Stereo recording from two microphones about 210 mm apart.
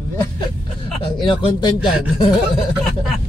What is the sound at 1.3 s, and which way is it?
A man's voice, 20° left (ahead or behind).